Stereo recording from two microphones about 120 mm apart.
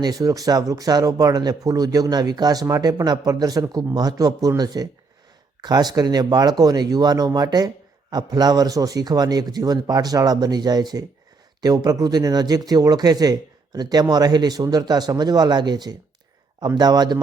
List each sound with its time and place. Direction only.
0.0 s speech: 30° right (ahead or behind)